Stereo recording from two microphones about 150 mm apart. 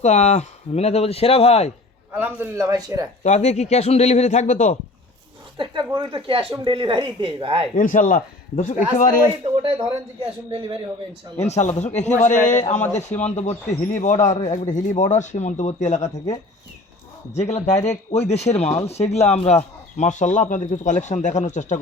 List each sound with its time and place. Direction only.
0.0 s speech: 50° left (ahead or behind)
2.1 s a man's voice: 10° right (ahead or behind)
3.2 s speech: 50° left (ahead or behind)
5.5 s speech: 30° right (ahead or behind)
7.8 s a man's voice: 65° left (ahead or behind)
9.4 s speech: 40° right (ahead or behind)
11.3 s speech: 45° left (ahead or behind)
17.3 s speech: 45° left (ahead or behind)